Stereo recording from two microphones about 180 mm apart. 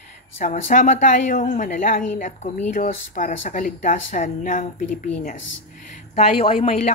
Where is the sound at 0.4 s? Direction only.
45° left (ahead or behind).